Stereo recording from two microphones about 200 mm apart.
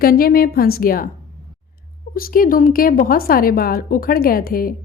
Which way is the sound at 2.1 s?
45° left (ahead or behind).